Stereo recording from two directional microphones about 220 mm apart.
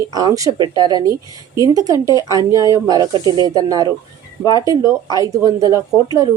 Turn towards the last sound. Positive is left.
turn(degrees=-15)  # may be behind; listen again after turning